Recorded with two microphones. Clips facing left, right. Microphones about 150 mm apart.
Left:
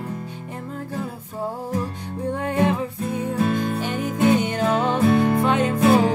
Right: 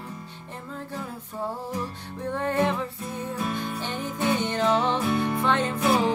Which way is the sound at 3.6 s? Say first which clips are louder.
Left 7 dB; 45° left (ahead or behind).